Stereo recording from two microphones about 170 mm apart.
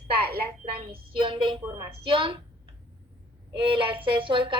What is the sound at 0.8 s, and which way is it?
A woman's voice, 30° right (ahead or behind).